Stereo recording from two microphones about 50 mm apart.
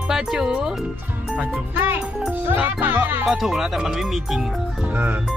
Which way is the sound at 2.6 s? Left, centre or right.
Right.